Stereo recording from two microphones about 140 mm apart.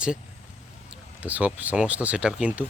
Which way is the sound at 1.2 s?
10° right (ahead or behind).